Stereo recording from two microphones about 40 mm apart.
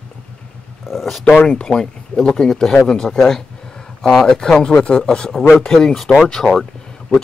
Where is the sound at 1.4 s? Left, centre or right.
Left.